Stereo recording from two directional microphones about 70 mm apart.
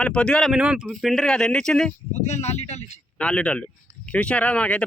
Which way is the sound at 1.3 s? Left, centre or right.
Centre.